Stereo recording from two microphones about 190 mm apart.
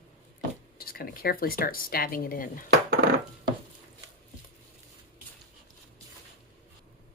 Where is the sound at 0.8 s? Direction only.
50° left (ahead or behind).